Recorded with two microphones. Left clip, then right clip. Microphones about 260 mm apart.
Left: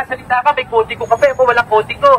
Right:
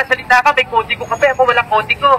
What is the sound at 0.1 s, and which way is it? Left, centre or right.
Speech, centre.